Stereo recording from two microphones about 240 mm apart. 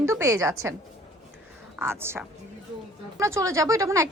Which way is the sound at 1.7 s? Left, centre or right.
Centre.